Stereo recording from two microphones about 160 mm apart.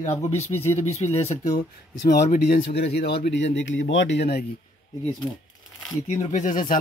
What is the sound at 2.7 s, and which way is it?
Speech, 90° left.